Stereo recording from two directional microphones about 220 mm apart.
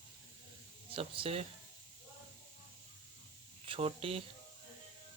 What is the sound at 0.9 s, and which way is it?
Speech, 25° right (ahead or behind).